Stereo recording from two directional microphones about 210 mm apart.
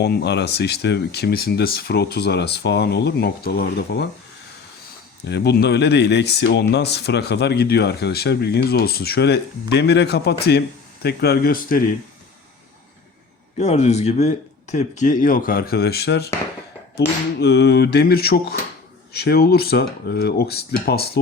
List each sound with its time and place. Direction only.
0.0 s speech: 50° left (ahead or behind)
5.2 s speech: 50° left (ahead or behind)
13.6 s speech: 30° left (ahead or behind); by 16.3 s 50° left (ahead or behind)
17.4 s speech: 50° left (ahead or behind)